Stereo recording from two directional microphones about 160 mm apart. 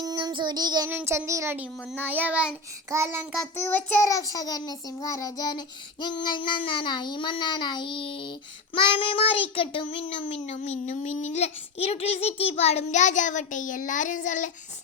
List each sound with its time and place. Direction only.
0.0 s child singing: 25° right (ahead or behind)
0.9 s speech: 15° right (ahead or behind)
3.6 s child singing: 10° left (ahead or behind); by 14.5 s 55° left (ahead or behind)